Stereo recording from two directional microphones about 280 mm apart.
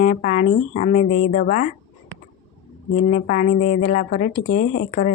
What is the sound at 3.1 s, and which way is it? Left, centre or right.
Speech, left.